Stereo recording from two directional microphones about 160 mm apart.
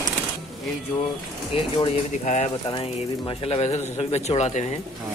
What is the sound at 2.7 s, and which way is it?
Speech, 35° left (ahead or behind).